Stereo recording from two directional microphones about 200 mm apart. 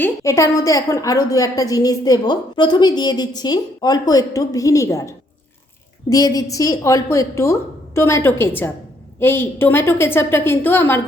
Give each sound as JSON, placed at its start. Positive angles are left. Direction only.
{"t": 0.0, "sound": "a woman's voice", "side_deg": 15}